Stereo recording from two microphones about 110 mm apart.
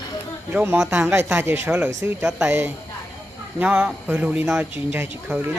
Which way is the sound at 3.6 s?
10° right (ahead or behind).